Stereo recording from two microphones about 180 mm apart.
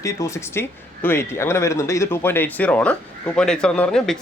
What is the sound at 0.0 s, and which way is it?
Speech, 15° left (ahead or behind).